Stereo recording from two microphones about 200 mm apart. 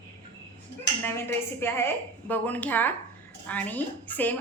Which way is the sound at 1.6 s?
10° left (ahead or behind).